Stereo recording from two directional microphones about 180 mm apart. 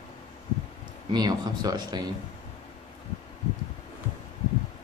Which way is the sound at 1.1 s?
20° right (ahead or behind).